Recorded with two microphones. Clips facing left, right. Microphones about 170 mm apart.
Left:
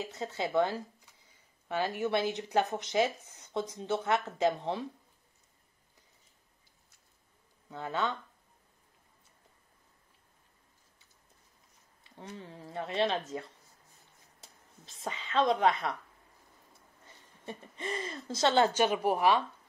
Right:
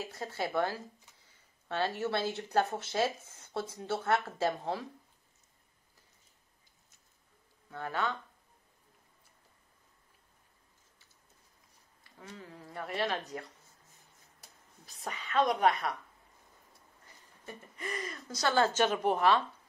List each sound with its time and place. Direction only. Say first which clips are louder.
0.0 s a woman's voice: left 2 dB; 20° left (ahead or behind)
7.7 s a woman's voice: left 1 dB; 20° left (ahead or behind)
12.0 s a woman's voice: left 3 dB; 25° left (ahead or behind)
17.5 s a woman's voice: left 3 dB; 25° left (ahead or behind)